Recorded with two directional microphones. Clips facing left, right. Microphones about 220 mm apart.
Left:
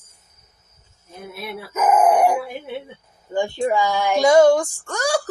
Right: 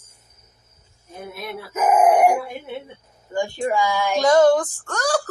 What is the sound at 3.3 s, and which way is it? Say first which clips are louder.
A woman's voice: left 2 dB; 15° left (ahead or behind).